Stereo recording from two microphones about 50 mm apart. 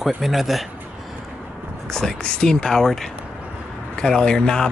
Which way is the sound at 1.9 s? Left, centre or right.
Centre.